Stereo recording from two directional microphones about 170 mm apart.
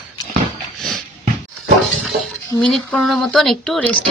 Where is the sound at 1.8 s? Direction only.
Centre (ahead or behind).